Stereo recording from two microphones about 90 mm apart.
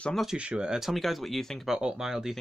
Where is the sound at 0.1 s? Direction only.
Centre (ahead or behind).